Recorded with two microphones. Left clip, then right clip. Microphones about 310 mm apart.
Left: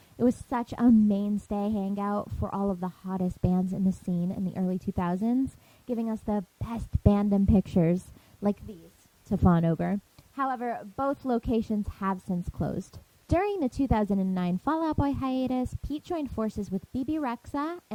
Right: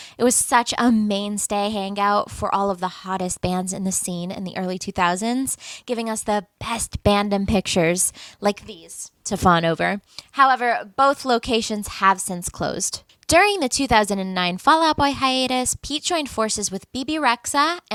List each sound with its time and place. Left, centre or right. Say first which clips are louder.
0.3 s a woman's voice: right 12 dB; centre
4.0 s a woman's voice: right 5 dB; right
4.5 s a woman's voice: right 11 dB; centre
9.3 s a woman's voice: right 10 dB; centre